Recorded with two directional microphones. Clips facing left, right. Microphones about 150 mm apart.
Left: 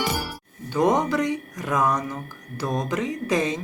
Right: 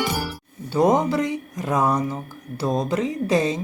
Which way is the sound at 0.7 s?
30° right (ahead or behind).